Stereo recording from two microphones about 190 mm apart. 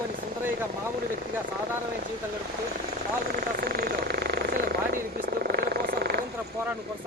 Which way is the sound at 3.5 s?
55° right (ahead or behind).